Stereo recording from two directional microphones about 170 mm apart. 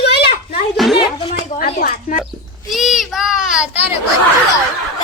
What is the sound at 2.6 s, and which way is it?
A child's voice, centre (ahead or behind).